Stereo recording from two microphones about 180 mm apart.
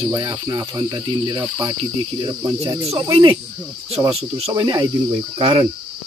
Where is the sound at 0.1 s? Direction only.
20° right (ahead or behind).